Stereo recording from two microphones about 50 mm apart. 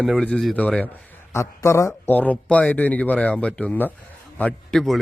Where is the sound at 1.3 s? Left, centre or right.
Left.